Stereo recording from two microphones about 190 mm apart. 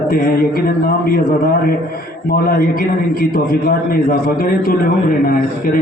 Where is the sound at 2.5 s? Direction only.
50° left (ahead or behind).